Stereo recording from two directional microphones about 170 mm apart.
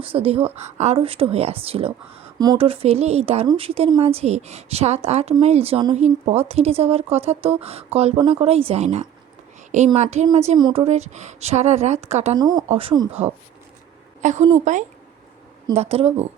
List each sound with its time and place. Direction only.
0.0 s speech: 35° right (ahead or behind)
2.4 s speech: 25° right (ahead or behind)
2.6 s speech: 35° right (ahead or behind)
12.4 s a woman's voice: 25° right (ahead or behind)